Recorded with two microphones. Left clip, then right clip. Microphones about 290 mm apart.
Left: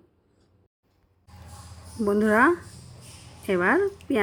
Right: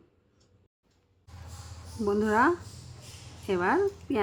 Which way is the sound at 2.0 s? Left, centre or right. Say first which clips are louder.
Left 4 dB; centre.